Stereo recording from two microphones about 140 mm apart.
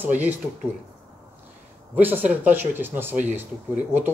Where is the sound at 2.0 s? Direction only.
15° right (ahead or behind).